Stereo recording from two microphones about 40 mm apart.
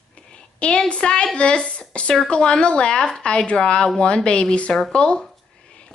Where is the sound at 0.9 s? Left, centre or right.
Left.